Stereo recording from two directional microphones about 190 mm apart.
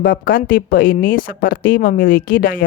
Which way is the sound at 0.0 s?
50° left (ahead or behind).